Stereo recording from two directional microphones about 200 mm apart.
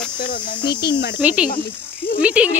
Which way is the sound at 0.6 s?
55° left (ahead or behind).